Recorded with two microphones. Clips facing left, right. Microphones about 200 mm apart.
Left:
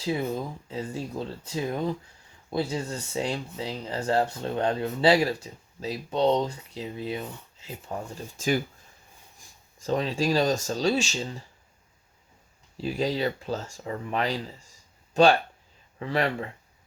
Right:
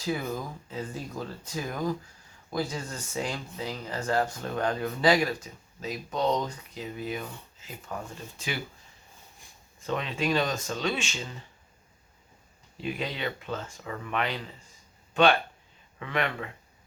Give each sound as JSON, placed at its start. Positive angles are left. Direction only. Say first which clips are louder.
{"t": 0.0, "sound": "speech", "louder": "left 3 dB", "side_deg": 25}
{"t": 8.4, "sound": "speech", "louder": "left 9 dB", "side_deg": 45}
{"t": 9.8, "sound": "speech", "louder": "left 4 dB", "side_deg": 35}
{"t": 12.7, "sound": "speech", "louder": "left 6 dB", "side_deg": 35}